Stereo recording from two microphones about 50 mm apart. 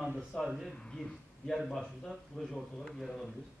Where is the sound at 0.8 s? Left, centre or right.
Centre.